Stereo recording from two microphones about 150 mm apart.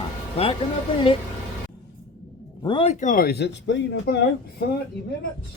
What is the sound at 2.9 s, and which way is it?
Speech, 55° left (ahead or behind).